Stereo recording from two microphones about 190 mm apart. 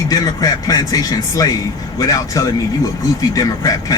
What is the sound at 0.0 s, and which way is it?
A man's voice, 20° left (ahead or behind).